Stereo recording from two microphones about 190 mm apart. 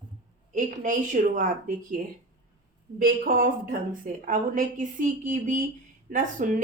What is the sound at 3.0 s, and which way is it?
A woman's voice, 50° right (ahead or behind).